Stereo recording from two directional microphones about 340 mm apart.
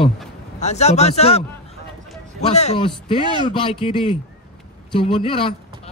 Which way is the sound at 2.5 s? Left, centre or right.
Centre.